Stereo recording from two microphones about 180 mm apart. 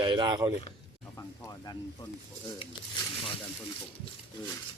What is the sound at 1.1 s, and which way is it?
Music, 20° left (ahead or behind).